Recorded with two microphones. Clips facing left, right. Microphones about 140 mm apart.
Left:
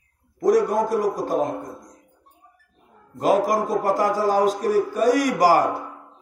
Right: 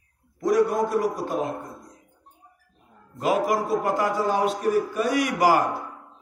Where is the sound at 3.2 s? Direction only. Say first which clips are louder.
Left 3 dB; 40° left (ahead or behind).